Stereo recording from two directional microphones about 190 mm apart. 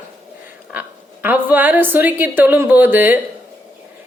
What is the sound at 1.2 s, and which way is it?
A woman's voice, 10° right (ahead or behind).